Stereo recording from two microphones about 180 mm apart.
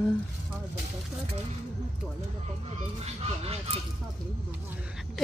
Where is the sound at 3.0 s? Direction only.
35° right (ahead or behind).